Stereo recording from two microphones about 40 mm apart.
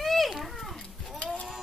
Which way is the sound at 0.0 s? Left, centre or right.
Centre.